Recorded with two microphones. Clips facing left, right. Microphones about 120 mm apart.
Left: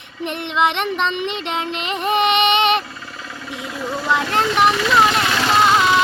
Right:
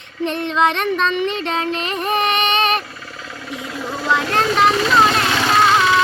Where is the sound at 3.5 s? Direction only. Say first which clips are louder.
Right 1 dB; 15° left (ahead or behind).